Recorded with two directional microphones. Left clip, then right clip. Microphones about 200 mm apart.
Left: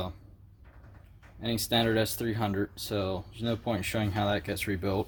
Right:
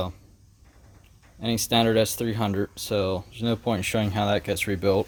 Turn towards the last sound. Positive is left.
turn(degrees=-50)  # may be behind; listen again after turning